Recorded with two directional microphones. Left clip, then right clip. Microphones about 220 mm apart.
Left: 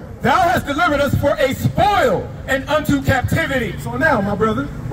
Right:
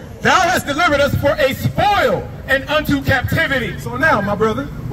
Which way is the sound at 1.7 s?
40° left (ahead or behind).